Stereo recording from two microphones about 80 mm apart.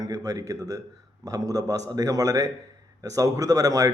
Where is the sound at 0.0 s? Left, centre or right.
Right.